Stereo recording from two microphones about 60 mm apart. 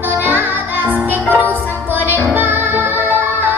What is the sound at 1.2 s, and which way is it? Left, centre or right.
Music, left.